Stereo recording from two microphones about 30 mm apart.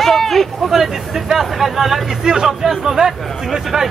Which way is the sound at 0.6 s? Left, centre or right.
Centre.